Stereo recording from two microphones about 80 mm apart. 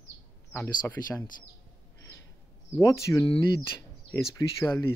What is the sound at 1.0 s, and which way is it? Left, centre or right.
Speech, left.